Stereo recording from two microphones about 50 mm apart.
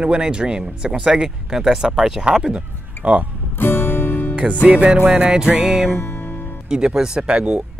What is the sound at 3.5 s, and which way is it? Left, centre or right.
Music, left.